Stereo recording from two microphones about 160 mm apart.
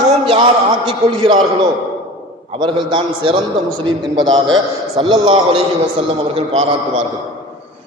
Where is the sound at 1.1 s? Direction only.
30° right (ahead or behind).